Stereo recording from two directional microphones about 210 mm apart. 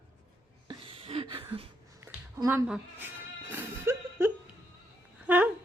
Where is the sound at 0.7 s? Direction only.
25° right (ahead or behind).